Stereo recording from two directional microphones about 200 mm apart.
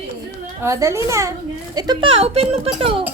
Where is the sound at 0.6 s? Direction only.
15° right (ahead or behind); by 2.6 s 30° right (ahead or behind).